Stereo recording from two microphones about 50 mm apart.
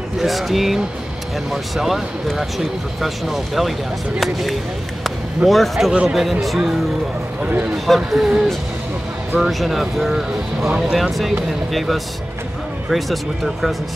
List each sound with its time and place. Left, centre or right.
0.2 s speech: centre
3.0 s speech: centre
7.4 s speech: right
7.7 s speech: centre